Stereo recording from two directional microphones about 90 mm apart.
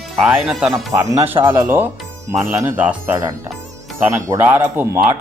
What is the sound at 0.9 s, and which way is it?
Speech, 30° right (ahead or behind).